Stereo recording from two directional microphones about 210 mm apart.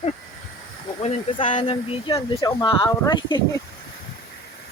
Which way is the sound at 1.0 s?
35° left (ahead or behind).